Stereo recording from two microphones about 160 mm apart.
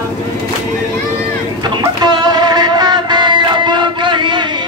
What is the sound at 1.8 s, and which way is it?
Music, 25° right (ahead or behind).